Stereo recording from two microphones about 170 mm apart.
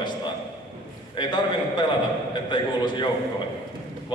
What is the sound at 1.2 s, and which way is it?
A man's voice, 25° left (ahead or behind).